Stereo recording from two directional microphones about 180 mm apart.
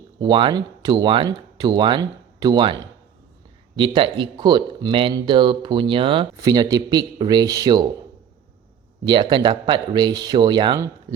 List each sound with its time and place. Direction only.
0.2 s speech: 25° right (ahead or behind)
3.8 s speech: 30° right (ahead or behind)
9.0 s speech: 25° right (ahead or behind)